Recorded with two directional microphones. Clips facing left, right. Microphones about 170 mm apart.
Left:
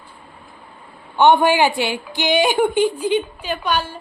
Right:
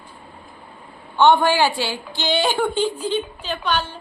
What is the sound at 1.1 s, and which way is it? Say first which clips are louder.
A woman's voice: left 2 dB; 15° left (ahead or behind).